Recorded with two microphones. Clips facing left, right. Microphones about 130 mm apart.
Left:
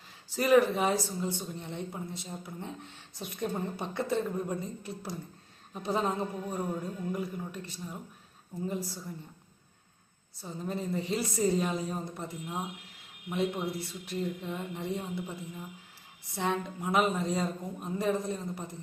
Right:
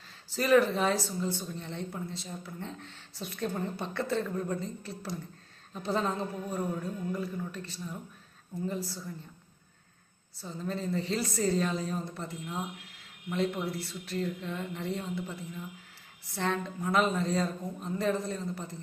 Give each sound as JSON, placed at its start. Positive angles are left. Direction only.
{"t": 0.3, "sound": "speech", "side_deg": 15}
{"t": 10.4, "sound": "speech", "side_deg": 15}